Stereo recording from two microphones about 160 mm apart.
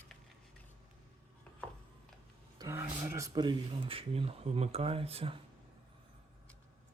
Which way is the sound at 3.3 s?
30° right (ahead or behind).